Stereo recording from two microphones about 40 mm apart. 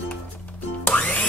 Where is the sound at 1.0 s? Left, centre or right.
Left.